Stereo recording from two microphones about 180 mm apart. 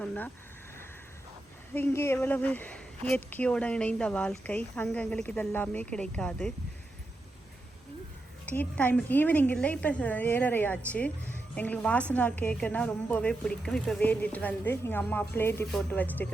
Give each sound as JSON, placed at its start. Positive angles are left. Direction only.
{"t": 0.0, "sound": "speech", "side_deg": 5}
{"t": 1.7, "sound": "a woman's voice", "side_deg": 15}
{"t": 8.4, "sound": "a woman's voice", "side_deg": 10}